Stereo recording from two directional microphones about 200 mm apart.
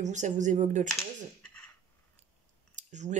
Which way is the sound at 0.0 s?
35° right (ahead or behind).